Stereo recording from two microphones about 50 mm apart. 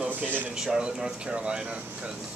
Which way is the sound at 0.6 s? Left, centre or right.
Centre.